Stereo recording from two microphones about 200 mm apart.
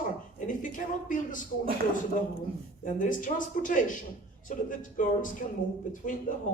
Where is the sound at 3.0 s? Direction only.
40° left (ahead or behind).